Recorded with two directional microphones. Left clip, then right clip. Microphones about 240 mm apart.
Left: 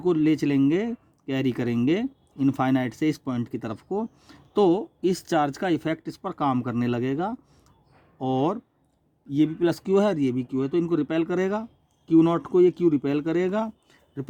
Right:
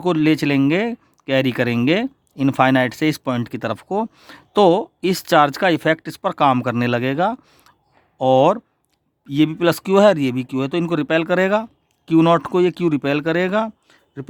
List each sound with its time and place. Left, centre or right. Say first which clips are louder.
0.0 s speech: right 5 dB; right; by 14.3 s centre